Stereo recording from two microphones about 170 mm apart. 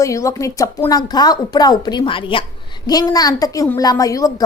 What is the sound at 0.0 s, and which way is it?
A woman's voice, 20° left (ahead or behind).